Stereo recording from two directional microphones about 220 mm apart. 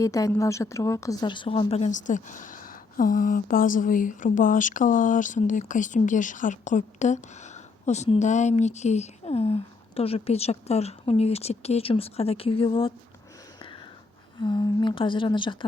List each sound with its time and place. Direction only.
0.0 s speech: 15° left (ahead or behind)
14.3 s speech: 20° left (ahead or behind)